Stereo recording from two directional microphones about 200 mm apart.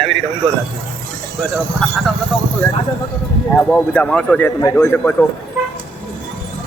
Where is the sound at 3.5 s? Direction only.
10° left (ahead or behind).